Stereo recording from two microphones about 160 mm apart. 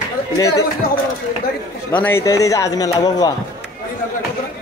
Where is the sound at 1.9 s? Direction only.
10° left (ahead or behind).